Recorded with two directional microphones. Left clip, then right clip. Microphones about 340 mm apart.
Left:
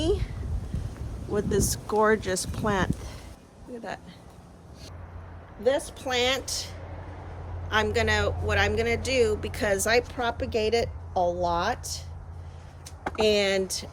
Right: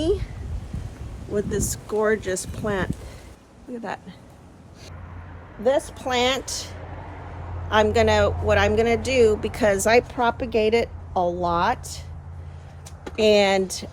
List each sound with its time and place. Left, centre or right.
0.0 s a sound: centre
1.3 s speech: centre
5.6 s speech: centre
13.1 s speech: centre